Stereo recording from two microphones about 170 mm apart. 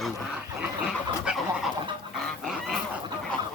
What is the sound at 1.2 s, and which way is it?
Chicken, centre (ahead or behind).